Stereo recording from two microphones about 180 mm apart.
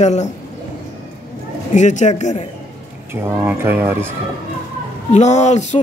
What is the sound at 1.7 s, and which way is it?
Speech, 40° left (ahead or behind).